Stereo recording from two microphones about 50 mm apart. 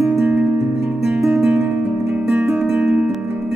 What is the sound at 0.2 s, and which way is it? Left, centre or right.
Music, right.